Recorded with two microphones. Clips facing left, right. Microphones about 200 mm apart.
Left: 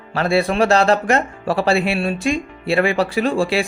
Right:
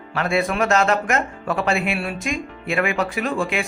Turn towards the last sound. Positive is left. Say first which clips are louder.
# left 5 dB
turn(degrees=30)  # may be behind; listen again after turning